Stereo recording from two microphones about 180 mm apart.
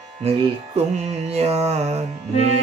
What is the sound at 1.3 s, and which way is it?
Mantra, 35° right (ahead or behind).